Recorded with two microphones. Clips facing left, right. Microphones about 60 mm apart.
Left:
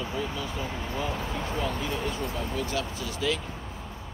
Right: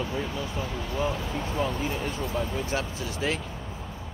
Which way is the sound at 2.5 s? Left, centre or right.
Right.